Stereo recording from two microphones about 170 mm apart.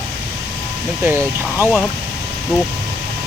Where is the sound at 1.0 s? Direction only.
10° right (ahead or behind).